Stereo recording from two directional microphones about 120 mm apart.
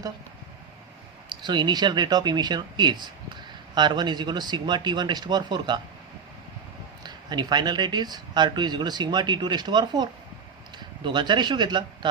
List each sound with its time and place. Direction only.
1.3 s speech: 40° right (ahead or behind)
7.0 s speech: 35° right (ahead or behind)